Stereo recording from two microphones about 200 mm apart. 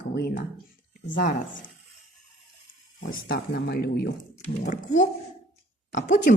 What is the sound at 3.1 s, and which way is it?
Speech, 50° left (ahead or behind).